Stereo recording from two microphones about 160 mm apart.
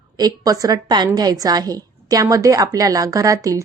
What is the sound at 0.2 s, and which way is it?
Speech, 25° right (ahead or behind).